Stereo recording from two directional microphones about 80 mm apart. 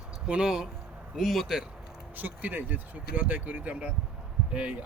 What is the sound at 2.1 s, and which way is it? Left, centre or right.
Speech, right.